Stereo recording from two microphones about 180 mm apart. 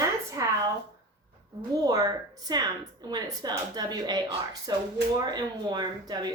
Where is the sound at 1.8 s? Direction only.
20° right (ahead or behind).